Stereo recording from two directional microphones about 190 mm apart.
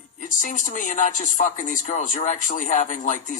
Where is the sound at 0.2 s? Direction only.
40° left (ahead or behind).